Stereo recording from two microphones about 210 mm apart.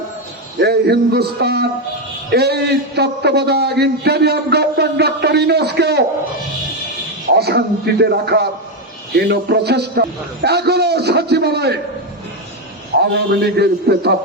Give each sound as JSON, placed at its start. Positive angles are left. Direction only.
{"t": 0.6, "sound": "a man's voice", "side_deg": -50}
{"t": 7.3, "sound": "a man's voice", "side_deg": -50}
{"t": 13.0, "sound": "a man's voice", "side_deg": -50}